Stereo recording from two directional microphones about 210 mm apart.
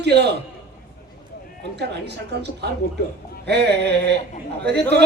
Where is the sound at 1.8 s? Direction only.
55° right (ahead or behind).